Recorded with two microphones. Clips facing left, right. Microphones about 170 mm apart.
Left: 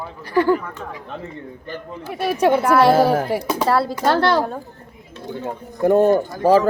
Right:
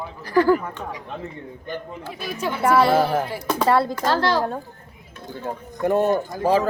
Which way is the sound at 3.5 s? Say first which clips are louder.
Right 3 dB; 5° left (ahead or behind).